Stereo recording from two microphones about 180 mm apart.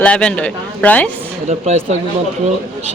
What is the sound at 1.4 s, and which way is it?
Speech, 40° right (ahead or behind).